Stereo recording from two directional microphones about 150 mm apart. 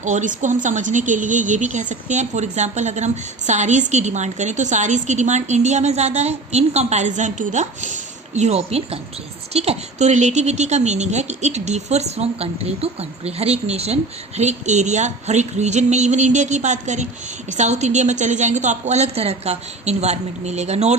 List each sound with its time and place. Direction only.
0.0 s a woman's voice: 55° right (ahead or behind)